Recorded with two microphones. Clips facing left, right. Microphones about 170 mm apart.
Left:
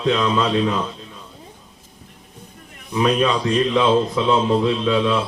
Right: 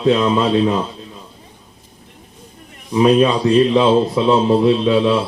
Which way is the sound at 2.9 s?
25° right (ahead or behind).